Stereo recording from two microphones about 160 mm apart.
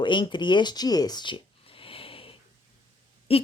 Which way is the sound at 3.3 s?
35° left (ahead or behind).